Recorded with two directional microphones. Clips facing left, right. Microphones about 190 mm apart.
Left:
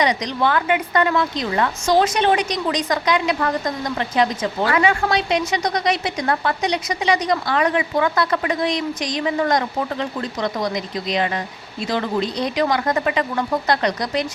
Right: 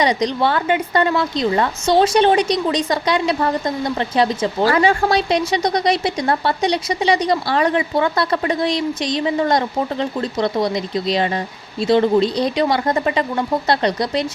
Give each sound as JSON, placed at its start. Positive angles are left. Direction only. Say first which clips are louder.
{"t": 0.0, "sound": "a woman's voice", "louder": "right 3 dB", "side_deg": -30}